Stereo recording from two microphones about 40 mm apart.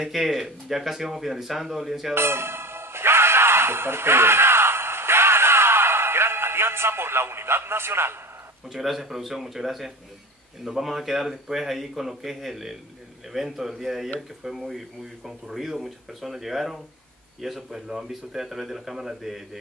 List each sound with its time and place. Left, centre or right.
0.0 s speech: centre
2.1 s music: right
8.6 s speech: centre